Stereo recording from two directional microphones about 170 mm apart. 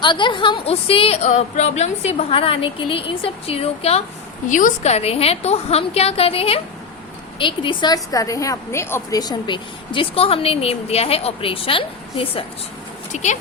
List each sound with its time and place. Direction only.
0.0 s a woman's voice: 30° left (ahead or behind)
4.4 s a woman's voice: 50° left (ahead or behind)